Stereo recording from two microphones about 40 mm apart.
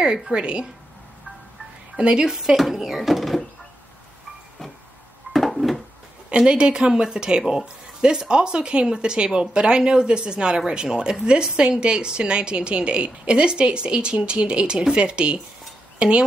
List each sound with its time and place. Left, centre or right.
0.0 s a woman's voice: right
2.0 s a woman's voice: right
2.3 s speech: centre
5.3 s a sound: centre
6.3 s a woman's voice: right